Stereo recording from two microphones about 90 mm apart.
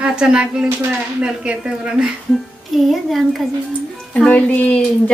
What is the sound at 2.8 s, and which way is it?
Speech, centre (ahead or behind).